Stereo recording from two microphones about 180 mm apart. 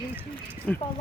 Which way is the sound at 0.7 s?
5° left (ahead or behind).